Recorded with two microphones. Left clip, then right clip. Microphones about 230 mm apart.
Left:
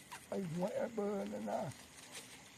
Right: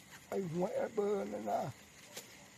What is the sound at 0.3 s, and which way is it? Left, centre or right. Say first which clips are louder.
Speech: right 4 dB; right.